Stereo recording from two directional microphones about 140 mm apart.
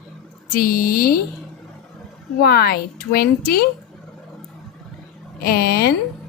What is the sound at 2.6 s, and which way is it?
A woman's voice, 90° left.